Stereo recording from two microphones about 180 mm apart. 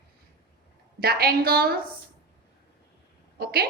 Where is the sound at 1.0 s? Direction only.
55° right (ahead or behind).